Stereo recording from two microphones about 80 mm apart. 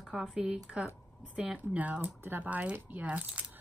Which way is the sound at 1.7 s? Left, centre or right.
Centre.